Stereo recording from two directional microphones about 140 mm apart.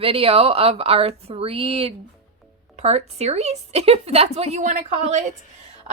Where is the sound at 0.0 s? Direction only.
40° right (ahead or behind).